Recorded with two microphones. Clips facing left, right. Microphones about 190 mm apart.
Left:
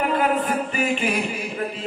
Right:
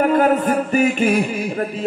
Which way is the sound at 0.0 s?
45° right (ahead or behind).